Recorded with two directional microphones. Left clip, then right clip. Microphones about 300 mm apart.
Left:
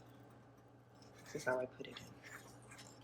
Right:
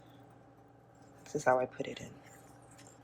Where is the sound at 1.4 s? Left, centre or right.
Centre.